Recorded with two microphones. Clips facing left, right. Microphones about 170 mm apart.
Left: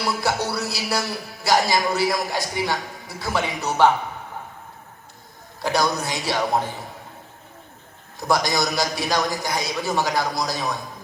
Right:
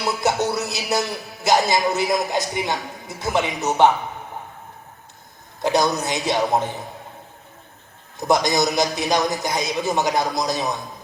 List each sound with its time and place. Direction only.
0.0 s speech: 20° right (ahead or behind)
5.6 s speech: 20° right (ahead or behind)
8.2 s speech: 20° right (ahead or behind)